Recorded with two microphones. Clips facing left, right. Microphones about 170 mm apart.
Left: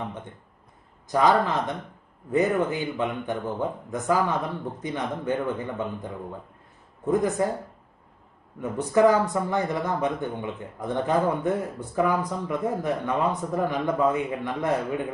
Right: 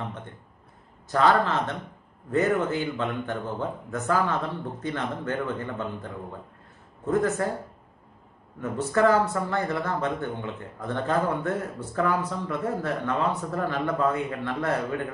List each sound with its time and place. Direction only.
1.0 s a man's voice: 15° left (ahead or behind)
8.5 s a man's voice: 15° left (ahead or behind)